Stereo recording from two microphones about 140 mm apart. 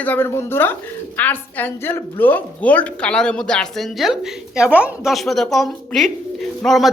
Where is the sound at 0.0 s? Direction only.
15° left (ahead or behind).